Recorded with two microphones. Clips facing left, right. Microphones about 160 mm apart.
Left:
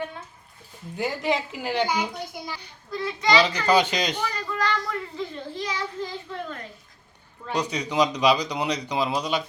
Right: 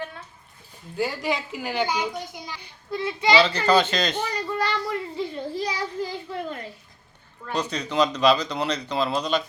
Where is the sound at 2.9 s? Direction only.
30° right (ahead or behind).